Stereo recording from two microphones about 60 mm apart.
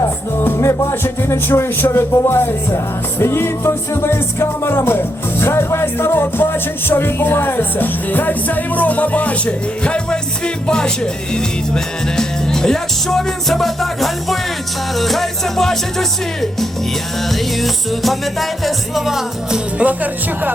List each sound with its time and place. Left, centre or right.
0.3 s music: left; by 19.6 s centre
19.8 s speech: right